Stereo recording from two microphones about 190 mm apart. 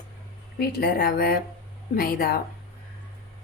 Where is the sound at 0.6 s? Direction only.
55° left (ahead or behind).